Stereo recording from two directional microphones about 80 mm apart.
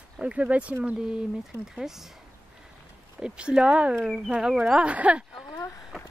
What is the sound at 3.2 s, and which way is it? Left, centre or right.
Speech, centre.